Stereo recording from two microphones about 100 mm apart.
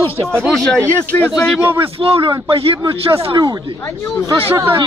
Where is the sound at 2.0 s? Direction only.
70° right (ahead or behind).